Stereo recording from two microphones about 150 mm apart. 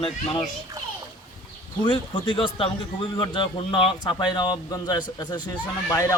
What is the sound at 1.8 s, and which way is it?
Speech, 30° left (ahead or behind).